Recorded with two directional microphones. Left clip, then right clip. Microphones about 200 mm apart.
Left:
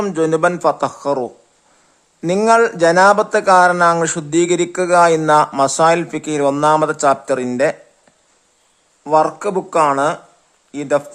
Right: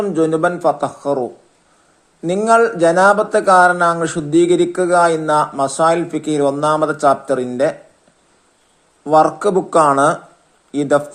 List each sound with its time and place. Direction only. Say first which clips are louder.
0.1 s a man's voice: left 2 dB; 15° left (ahead or behind)
2.5 s speech: even; 15° left (ahead or behind)
9.0 s speech: right 2 dB; 5° left (ahead or behind)